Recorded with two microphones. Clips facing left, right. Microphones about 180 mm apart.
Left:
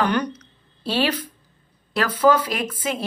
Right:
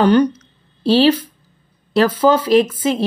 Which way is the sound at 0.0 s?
30° right (ahead or behind).